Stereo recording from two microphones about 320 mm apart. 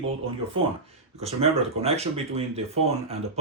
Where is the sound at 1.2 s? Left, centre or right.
Centre.